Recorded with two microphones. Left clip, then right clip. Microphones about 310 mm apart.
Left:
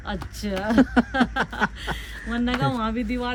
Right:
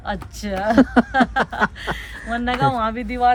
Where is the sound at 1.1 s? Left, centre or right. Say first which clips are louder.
Right 6 dB; centre.